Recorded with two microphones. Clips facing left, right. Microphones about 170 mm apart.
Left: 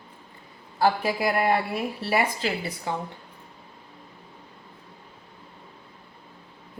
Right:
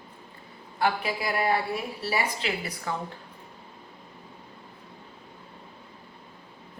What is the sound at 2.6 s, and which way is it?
Speech, 25° left (ahead or behind).